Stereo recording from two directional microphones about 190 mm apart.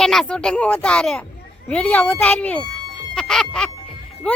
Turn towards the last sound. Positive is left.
turn(degrees=5)  # may be behind; listen again after turning